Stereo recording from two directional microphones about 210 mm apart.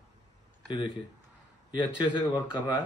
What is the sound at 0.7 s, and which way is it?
A man's voice, 25° left (ahead or behind).